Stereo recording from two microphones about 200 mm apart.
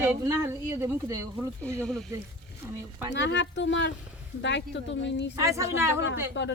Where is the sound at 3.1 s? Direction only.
60° left (ahead or behind).